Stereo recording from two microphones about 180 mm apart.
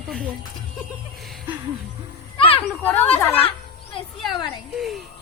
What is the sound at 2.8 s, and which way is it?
Speech, 10° left (ahead or behind).